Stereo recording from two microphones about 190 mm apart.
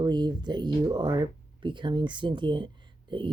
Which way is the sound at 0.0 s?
25° right (ahead or behind).